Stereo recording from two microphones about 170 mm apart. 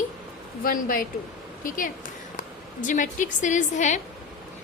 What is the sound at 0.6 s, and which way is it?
A woman's voice, 55° left (ahead or behind).